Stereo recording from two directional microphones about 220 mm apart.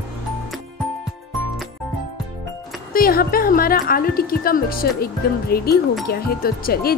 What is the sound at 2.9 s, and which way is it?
Speech, 40° left (ahead or behind).